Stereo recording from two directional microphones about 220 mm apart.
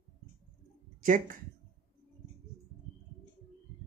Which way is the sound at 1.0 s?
40° right (ahead or behind).